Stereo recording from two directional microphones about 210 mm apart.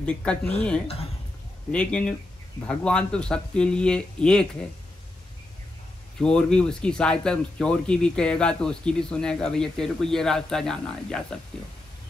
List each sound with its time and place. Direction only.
0.0 s speech: 5° left (ahead or behind)
6.1 s speech: 5° left (ahead or behind)